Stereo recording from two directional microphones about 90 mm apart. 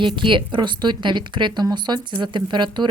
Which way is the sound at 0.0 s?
65° right (ahead or behind).